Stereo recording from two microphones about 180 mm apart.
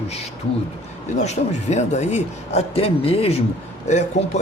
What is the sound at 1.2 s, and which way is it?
A man's voice, 40° left (ahead or behind).